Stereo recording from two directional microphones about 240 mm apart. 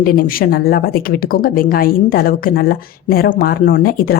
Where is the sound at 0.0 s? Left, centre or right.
Left.